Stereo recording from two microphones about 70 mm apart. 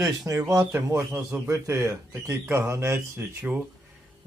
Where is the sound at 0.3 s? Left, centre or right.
Right.